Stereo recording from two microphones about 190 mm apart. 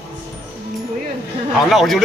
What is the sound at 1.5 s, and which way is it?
Speech, centre (ahead or behind).